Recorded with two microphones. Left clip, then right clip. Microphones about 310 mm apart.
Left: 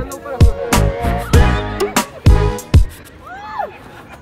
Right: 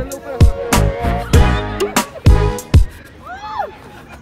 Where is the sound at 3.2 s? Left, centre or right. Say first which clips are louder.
Right 1 dB; centre.